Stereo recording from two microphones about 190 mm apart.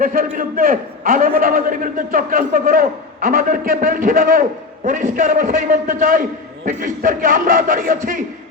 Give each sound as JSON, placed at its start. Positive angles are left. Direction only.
{"t": 0.0, "sound": "a man's voice", "side_deg": -45}